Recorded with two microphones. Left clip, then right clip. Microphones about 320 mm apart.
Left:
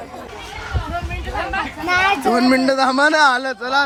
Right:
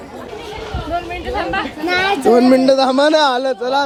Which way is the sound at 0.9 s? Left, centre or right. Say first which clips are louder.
Right 6 dB; centre.